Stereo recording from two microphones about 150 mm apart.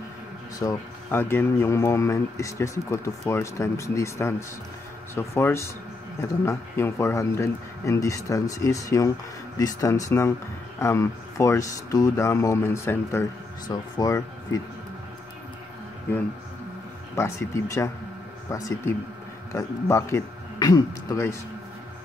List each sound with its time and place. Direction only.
0.6 s speech: 20° left (ahead or behind)
17.1 s speech: 20° left (ahead or behind)